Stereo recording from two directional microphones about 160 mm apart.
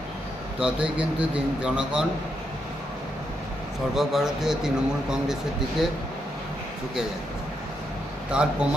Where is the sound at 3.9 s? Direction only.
Centre (ahead or behind).